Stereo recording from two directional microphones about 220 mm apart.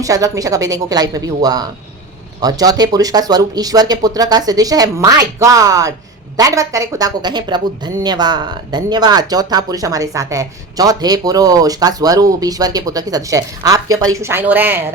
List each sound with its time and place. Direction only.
0.0 s speech: 15° right (ahead or behind)